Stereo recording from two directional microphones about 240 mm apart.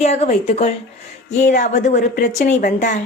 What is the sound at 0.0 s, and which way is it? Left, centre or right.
A woman's voice, left.